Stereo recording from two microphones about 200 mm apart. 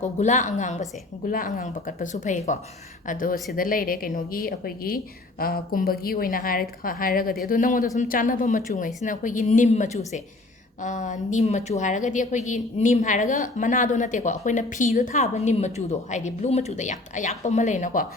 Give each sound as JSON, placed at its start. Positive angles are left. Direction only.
{"t": 0.0, "sound": "a woman's voice", "side_deg": 35}